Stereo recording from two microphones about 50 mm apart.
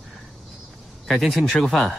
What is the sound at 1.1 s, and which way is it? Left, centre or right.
Speech, centre.